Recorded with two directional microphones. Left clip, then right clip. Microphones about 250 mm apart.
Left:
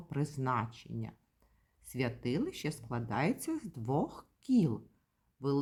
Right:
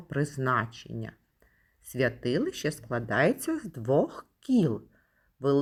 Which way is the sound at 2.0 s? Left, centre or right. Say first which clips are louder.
Right 8 dB; left.